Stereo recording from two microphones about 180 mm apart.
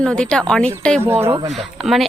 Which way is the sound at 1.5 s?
Centre (ahead or behind).